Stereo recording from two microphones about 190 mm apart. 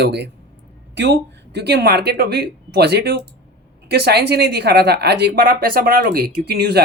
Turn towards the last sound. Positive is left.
turn(degrees=-60)  # may be behind; listen again after turning